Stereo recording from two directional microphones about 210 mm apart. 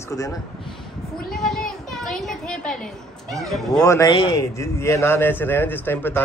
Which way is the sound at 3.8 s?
15° left (ahead or behind).